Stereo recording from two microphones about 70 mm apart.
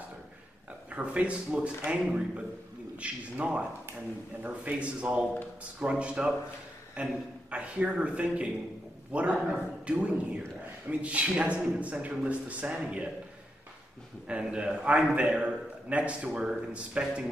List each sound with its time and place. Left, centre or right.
0.8 s a man's voice: centre
14.2 s a man's voice: centre